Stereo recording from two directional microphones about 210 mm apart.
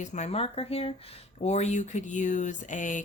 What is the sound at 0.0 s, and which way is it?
Speech, 35° left (ahead or behind).